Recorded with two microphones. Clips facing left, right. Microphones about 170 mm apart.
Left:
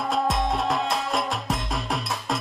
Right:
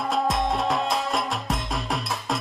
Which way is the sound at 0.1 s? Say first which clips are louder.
Even; centre (ahead or behind).